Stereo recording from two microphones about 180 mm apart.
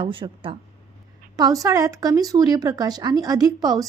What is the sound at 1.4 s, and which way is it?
Speech, 20° right (ahead or behind).